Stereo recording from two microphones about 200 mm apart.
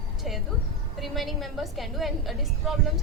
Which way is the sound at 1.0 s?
Centre (ahead or behind).